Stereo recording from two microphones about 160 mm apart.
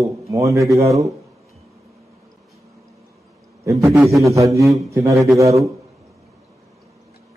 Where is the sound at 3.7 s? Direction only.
15° right (ahead or behind).